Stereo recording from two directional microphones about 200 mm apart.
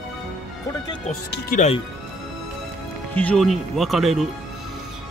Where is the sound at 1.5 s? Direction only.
40° left (ahead or behind).